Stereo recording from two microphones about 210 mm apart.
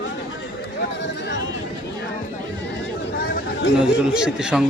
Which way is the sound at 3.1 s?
45° left (ahead or behind).